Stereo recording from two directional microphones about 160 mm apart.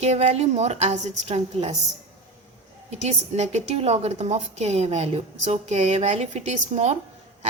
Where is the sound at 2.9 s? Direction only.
45° right (ahead or behind).